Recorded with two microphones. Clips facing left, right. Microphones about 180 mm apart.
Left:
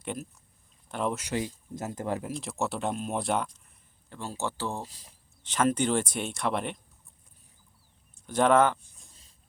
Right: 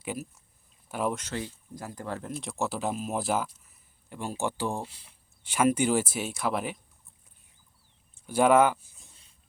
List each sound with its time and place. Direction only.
0.0 s speech: 5° right (ahead or behind)
1.1 s speech: 15° left (ahead or behind)
2.3 s speech: centre (ahead or behind)
4.1 s speech: 15° right (ahead or behind)
4.9 s speech: 40° left (ahead or behind)
5.4 s speech: 10° right (ahead or behind)
8.1 s speech: 10° right (ahead or behind)